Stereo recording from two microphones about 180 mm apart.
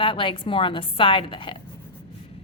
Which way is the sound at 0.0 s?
30° left (ahead or behind).